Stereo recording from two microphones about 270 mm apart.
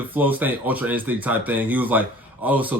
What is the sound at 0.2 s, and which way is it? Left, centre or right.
A man's voice, centre.